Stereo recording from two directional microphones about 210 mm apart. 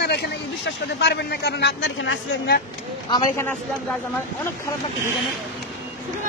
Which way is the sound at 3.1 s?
20° left (ahead or behind).